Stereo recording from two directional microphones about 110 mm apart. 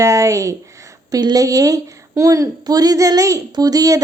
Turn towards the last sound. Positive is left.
turn(degrees=-35)  # may be behind; listen again after turning